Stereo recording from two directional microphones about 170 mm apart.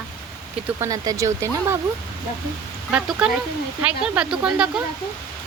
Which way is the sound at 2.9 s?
5° right (ahead or behind).